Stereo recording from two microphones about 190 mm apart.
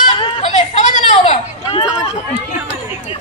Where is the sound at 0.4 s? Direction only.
40° left (ahead or behind).